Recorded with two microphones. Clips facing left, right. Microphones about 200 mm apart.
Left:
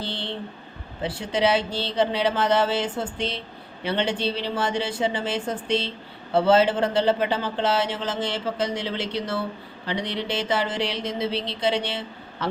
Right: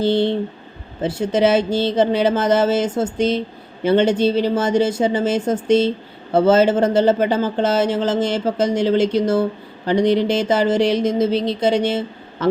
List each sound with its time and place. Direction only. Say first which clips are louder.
0.0 s speech: right 14 dB; 45° right (ahead or behind)